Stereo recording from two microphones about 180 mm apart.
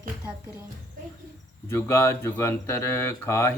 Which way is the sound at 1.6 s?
15° left (ahead or behind).